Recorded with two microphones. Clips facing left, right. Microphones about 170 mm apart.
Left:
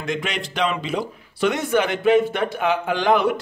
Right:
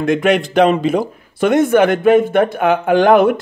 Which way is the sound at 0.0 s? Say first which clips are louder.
Right 12 dB; 55° right (ahead or behind).